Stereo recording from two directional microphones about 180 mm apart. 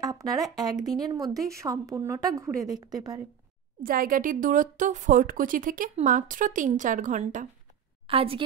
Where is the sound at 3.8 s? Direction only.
50° right (ahead or behind).